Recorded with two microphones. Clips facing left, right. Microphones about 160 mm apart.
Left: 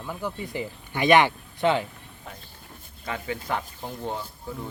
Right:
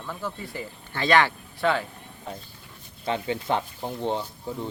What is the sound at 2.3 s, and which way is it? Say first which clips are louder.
Speech: right 5 dB; 30° right (ahead or behind).